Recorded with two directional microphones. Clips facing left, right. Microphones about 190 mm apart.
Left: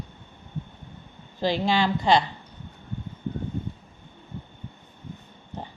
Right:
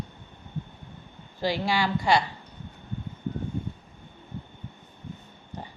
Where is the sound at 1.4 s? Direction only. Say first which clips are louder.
Left 3 dB; 20° left (ahead or behind).